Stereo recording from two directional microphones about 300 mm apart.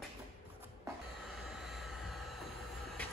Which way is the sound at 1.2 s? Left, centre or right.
Centre.